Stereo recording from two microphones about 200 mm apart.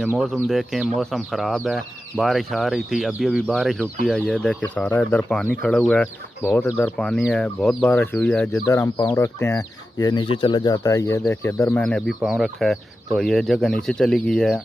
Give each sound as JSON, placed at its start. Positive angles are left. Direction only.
{"t": 0.0, "sound": "speech", "side_deg": -5}
{"t": 8.6, "sound": "speech", "side_deg": 15}